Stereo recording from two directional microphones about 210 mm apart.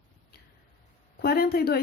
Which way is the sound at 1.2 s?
45° left (ahead or behind).